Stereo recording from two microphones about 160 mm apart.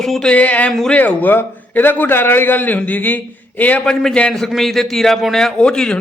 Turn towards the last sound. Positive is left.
turn(degrees=5)  # may be behind; listen again after turning